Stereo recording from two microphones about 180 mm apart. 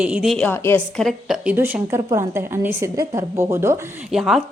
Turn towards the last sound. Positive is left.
turn(degrees=0)  # may be behind; listen again after turning